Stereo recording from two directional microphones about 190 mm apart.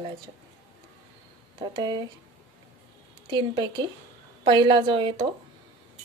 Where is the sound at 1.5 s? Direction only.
25° right (ahead or behind).